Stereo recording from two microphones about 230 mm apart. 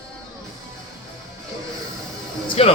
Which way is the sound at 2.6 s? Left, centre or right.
Left.